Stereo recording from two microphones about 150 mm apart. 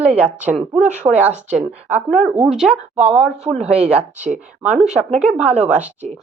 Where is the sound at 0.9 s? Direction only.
50° right (ahead or behind).